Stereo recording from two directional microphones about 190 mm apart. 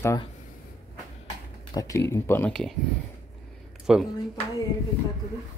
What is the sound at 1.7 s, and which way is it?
Speech, 15° left (ahead or behind).